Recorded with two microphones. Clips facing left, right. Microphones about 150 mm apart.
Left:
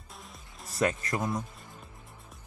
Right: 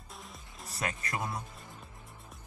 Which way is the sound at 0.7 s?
35° left (ahead or behind).